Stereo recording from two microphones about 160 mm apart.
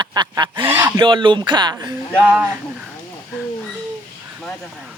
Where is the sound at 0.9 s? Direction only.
30° right (ahead or behind).